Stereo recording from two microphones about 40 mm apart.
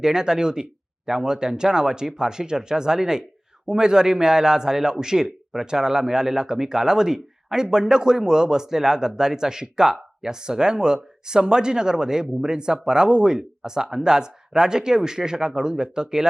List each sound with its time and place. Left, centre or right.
0.0 s a man's voice: centre